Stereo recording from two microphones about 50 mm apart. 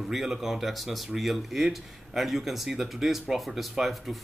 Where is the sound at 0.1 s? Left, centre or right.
Centre.